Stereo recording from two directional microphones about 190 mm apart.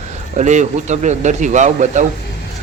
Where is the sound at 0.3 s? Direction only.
40° right (ahead or behind).